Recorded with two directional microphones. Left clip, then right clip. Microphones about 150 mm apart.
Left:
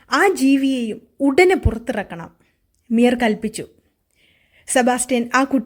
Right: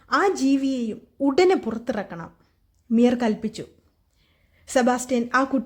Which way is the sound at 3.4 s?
15° left (ahead or behind).